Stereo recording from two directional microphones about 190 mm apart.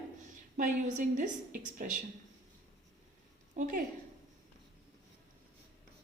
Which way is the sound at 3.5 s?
45° right (ahead or behind).